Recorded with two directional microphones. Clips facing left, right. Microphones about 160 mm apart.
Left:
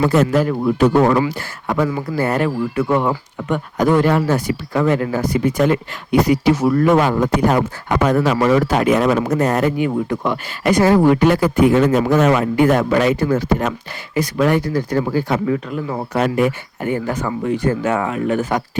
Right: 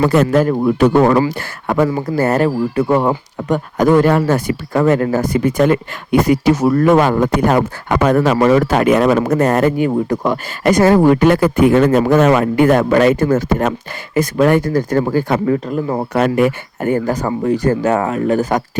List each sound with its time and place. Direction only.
0.0 s speech: 60° right (ahead or behind)
2.0 s speech: 45° right (ahead or behind)
16.1 s speech: 60° right (ahead or behind); by 18.6 s 40° right (ahead or behind)